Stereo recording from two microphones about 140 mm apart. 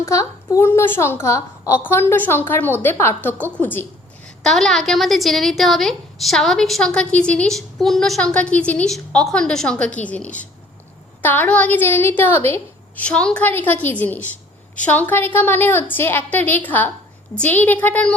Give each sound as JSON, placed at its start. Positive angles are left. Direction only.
{"t": 0.0, "sound": "a woman's voice", "side_deg": 20}
{"t": 4.4, "sound": "a woman's voice", "side_deg": 0}